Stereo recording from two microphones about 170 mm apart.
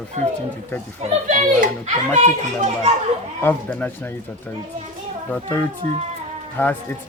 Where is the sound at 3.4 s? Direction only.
10° left (ahead or behind).